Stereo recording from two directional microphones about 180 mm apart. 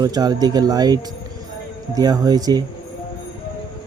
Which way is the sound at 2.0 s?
20° right (ahead or behind).